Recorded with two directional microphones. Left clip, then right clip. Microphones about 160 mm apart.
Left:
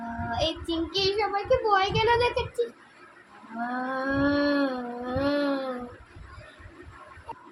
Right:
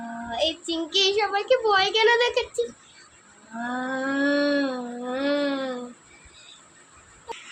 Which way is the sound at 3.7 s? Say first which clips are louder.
Right 2 dB; 30° right (ahead or behind).